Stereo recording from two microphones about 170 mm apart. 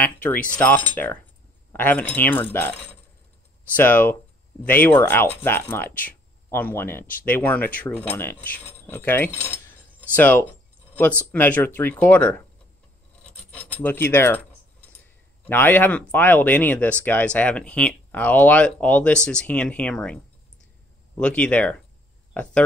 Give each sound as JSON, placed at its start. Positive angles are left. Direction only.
{"t": 0.0, "sound": "cutlery", "side_deg": 10}
{"t": 0.5, "sound": "speech", "side_deg": 10}
{"t": 3.7, "sound": "speech", "side_deg": 10}
{"t": 13.5, "sound": "speech", "side_deg": 5}
{"t": 15.4, "sound": "speech", "side_deg": 10}
{"t": 21.2, "sound": "speech", "side_deg": 5}